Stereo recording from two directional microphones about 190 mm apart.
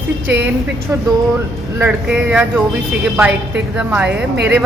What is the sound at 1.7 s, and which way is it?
Speech, 10° right (ahead or behind).